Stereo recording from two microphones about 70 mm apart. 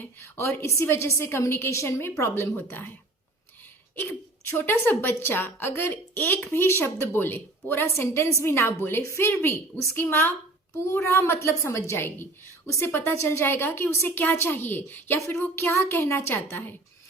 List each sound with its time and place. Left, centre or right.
0.2 s a woman's voice: left
4.5 s a woman's voice: left